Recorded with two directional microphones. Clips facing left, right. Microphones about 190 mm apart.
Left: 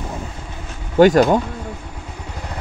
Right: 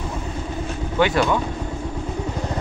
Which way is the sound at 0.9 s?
45° left (ahead or behind).